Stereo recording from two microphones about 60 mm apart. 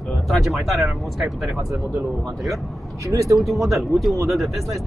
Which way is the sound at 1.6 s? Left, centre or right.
Right.